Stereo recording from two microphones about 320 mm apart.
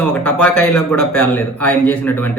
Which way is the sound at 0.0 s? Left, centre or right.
Centre.